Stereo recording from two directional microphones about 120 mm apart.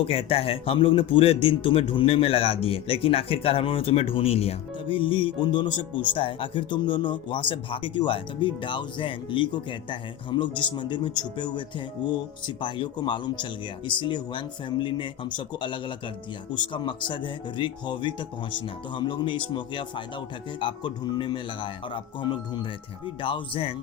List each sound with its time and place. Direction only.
0.0 s speech: 55° left (ahead or behind)